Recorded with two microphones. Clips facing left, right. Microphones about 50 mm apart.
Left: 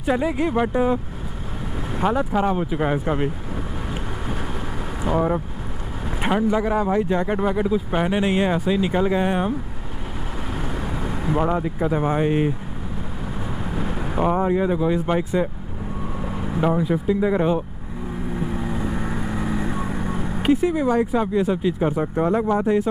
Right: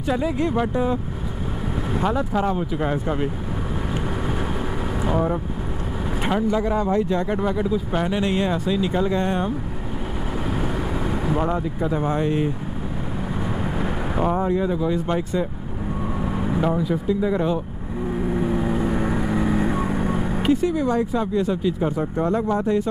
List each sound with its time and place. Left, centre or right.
0.0 s speech: centre
2.0 s speech: centre
5.1 s speech: centre
10.6 s vehicle: centre
11.3 s speech: centre
13.7 s vehicle: centre
14.2 s speech: centre
14.6 s speech: left
16.2 s vehicle: centre
16.6 s speech: centre
18.3 s vehicle: right
20.4 s speech: centre